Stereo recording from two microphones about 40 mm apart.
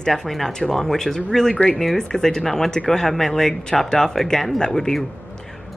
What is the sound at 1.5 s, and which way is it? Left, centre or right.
A woman's voice, left.